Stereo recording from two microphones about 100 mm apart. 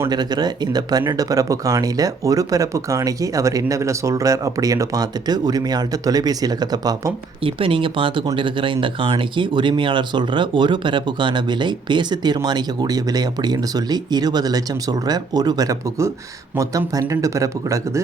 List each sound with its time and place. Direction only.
0.1 s speech: 45° right (ahead or behind)
7.4 s speech: 65° right (ahead or behind); by 18.0 s 30° right (ahead or behind)